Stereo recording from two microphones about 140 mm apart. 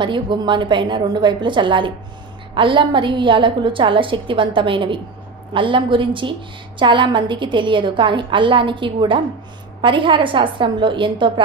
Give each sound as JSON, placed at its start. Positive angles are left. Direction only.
{"t": 0.0, "sound": "a woman's voice", "side_deg": -35}